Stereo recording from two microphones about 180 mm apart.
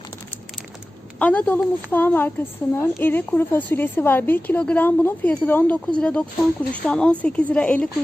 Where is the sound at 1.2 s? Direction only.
10° left (ahead or behind).